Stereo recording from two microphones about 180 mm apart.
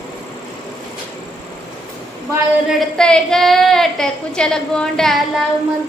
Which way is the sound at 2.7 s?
Centre (ahead or behind).